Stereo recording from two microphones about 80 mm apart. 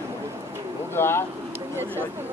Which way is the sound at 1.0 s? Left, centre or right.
Left.